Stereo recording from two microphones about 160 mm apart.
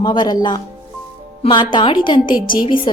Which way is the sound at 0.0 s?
25° left (ahead or behind).